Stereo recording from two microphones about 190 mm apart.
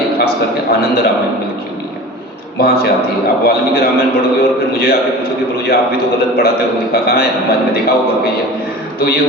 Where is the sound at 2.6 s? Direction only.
55° left (ahead or behind).